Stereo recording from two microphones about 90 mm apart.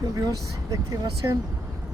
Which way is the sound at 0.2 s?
40° right (ahead or behind).